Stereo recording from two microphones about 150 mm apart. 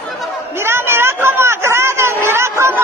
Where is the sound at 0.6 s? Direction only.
15° right (ahead or behind).